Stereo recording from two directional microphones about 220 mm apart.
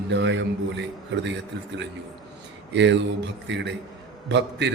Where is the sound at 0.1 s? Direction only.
55° right (ahead or behind).